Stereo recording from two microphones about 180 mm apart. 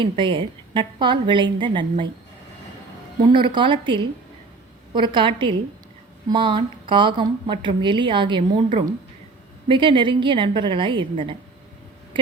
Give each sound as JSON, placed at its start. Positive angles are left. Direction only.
{"t": 0.0, "sound": "speech", "side_deg": -25}
{"t": 3.2, "sound": "speech", "side_deg": -25}